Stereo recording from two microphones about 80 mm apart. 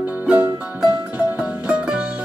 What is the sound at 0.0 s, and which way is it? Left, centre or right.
Music, right.